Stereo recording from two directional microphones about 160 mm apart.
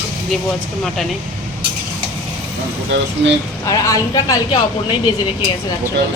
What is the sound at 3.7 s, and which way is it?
Speech, 20° left (ahead or behind).